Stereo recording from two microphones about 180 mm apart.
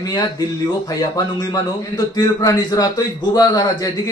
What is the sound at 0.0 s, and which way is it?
A man's voice, 20° left (ahead or behind).